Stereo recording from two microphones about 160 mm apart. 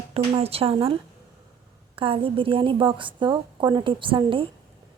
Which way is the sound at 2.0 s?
35° right (ahead or behind).